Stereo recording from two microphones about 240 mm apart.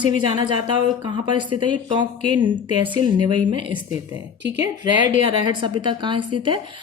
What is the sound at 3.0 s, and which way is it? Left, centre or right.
Speech, centre.